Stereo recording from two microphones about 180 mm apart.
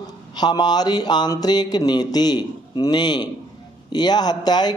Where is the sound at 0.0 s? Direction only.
25° left (ahead or behind).